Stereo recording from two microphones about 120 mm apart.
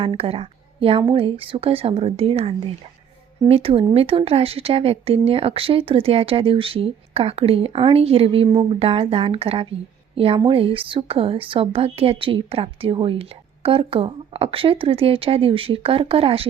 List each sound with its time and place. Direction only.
0.0 s speech: 50° right (ahead or behind)